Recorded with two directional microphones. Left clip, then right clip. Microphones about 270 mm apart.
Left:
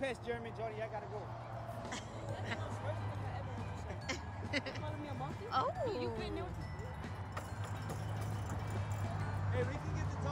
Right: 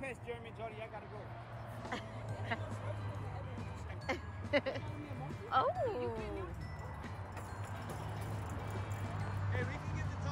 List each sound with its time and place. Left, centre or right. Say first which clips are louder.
0.3 s vehicle: left 4 dB; left
4.1 s a sound: right 5 dB; centre
9.5 s music: left 3 dB; left